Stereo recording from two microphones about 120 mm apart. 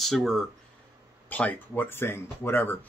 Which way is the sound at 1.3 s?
15° left (ahead or behind).